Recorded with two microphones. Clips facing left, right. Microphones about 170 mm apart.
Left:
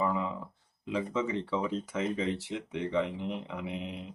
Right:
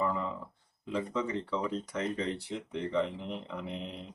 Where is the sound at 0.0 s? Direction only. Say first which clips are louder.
Left 2 dB; 5° left (ahead or behind).